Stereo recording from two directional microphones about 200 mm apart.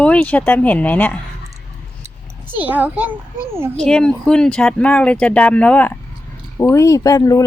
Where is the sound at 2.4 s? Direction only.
10° right (ahead or behind).